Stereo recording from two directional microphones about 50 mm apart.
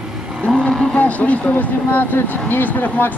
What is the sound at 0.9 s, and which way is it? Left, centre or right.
Speech, left.